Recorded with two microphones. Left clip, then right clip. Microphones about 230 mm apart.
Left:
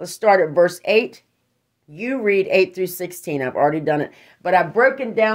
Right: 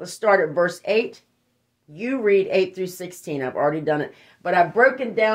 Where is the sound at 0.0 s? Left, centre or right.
Left.